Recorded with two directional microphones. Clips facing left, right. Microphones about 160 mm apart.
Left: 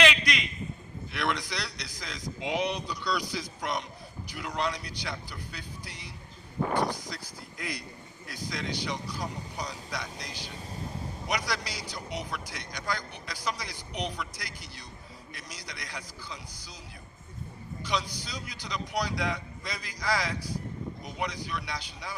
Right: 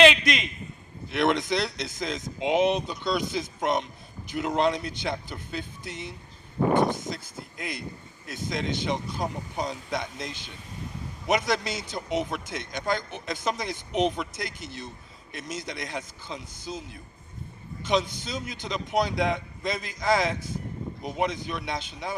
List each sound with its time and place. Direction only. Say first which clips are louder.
0.0 s a sound: right 7 dB; 25° right (ahead or behind)
1.1 s speech: right 8 dB; 25° right (ahead or behind)
17.8 s speech: right 7 dB; 25° right (ahead or behind)